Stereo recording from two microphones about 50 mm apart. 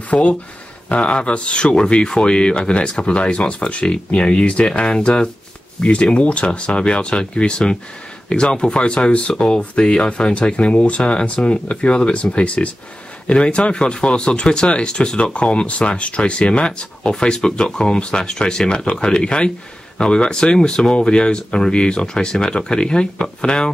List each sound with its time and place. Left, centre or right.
0.1 s speech: left